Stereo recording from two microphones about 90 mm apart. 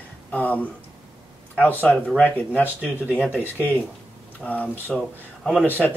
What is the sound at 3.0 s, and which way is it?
Speech, 20° right (ahead or behind).